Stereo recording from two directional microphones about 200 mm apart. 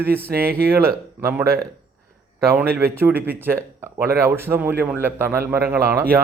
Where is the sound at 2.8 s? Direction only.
10° right (ahead or behind).